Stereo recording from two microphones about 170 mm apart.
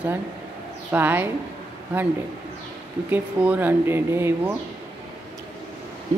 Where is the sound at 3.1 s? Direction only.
10° right (ahead or behind).